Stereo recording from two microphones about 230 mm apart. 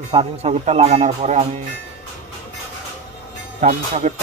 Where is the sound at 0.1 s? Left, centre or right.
Right.